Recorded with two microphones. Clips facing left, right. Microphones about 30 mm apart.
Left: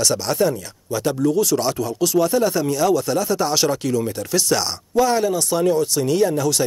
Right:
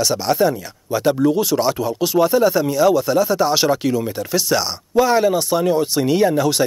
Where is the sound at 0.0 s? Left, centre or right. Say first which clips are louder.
Right 2 dB; centre.